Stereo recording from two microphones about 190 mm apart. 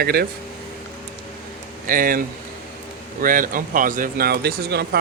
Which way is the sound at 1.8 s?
45° right (ahead or behind).